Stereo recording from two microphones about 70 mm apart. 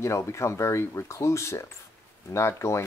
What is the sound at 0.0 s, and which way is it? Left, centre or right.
Speech, left.